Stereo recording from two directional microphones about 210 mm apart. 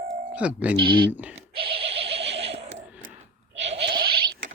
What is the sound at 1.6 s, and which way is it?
Neigh, 30° right (ahead or behind).